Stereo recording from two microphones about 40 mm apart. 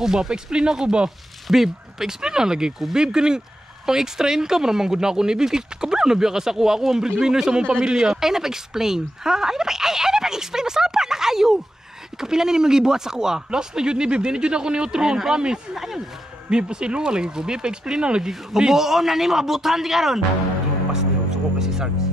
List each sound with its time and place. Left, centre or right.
0.0 s speech: centre
16.4 s speech: right
21.5 s music: centre